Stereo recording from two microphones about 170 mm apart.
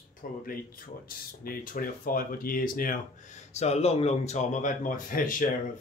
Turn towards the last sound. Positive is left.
turn(degrees=55)  # may be behind; listen again after turning